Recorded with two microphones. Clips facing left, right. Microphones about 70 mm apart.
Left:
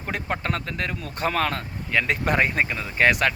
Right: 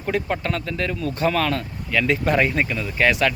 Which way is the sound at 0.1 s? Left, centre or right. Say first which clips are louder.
Right 4 dB; left.